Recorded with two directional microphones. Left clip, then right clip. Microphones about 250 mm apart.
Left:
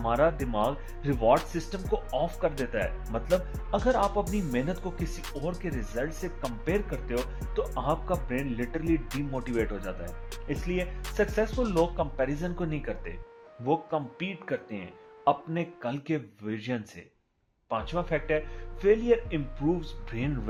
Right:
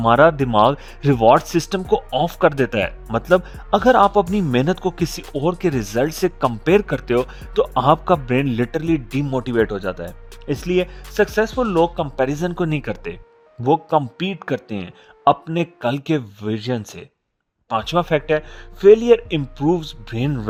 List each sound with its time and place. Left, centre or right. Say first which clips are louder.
0.0 s speech: right 13 dB; right